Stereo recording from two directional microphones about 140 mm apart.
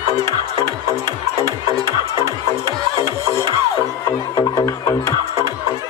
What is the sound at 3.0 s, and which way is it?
Music, 20° left (ahead or behind).